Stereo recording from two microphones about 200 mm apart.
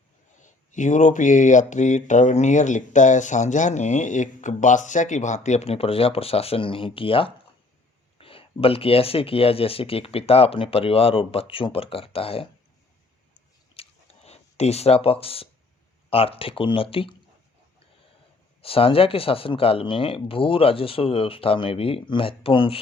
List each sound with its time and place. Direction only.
0.4 s speech: 40° left (ahead or behind)
13.7 s a sound: 30° left (ahead or behind)
16.0 s speech: 30° left (ahead or behind)
18.6 s speech: 30° left (ahead or behind)